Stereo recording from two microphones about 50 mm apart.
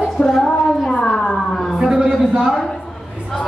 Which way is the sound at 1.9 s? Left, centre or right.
Centre.